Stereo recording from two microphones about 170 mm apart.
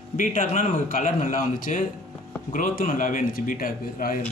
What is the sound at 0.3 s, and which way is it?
Speech, 45° left (ahead or behind).